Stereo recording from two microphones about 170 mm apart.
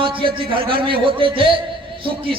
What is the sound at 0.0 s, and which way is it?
A man's voice, 30° right (ahead or behind).